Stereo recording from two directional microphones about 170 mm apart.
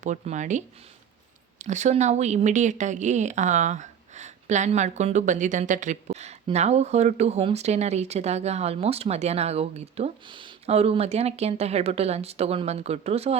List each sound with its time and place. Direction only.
0.0 s a woman's voice: 45° right (ahead or behind)